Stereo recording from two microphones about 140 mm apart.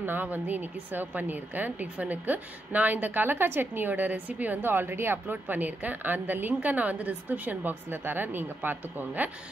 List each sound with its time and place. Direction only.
0.0 s a woman's voice: 15° right (ahead or behind)